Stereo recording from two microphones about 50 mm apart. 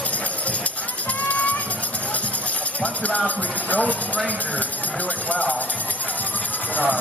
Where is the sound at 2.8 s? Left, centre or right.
Left.